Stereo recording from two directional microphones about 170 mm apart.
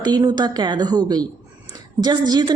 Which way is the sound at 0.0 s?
25° right (ahead or behind).